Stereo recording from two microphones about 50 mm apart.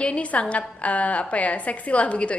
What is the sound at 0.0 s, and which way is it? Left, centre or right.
A woman's voice, left.